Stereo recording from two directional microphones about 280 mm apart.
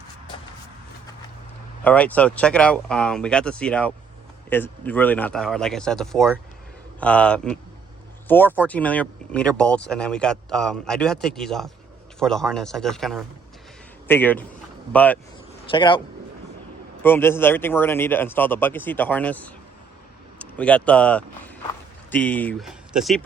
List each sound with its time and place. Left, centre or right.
1.8 s speech: centre
15.7 s speech: centre
17.0 s speech: centre